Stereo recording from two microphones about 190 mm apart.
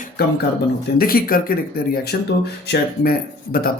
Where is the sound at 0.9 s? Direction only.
50° left (ahead or behind).